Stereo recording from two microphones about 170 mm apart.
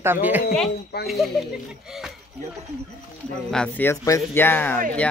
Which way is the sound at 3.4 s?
5° left (ahead or behind).